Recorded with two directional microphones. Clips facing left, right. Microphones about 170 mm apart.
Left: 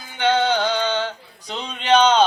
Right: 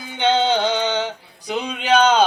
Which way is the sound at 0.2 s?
20° right (ahead or behind).